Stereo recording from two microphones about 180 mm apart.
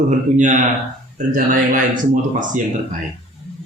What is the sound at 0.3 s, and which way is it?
Speech, 45° right (ahead or behind).